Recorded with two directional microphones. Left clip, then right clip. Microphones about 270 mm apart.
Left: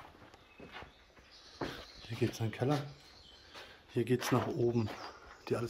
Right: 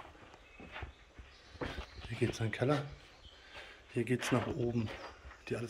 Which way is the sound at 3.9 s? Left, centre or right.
Centre.